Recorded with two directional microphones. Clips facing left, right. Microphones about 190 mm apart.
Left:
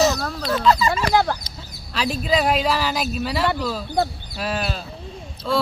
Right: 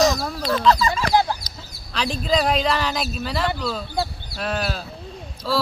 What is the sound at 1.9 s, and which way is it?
Speech, 5° left (ahead or behind).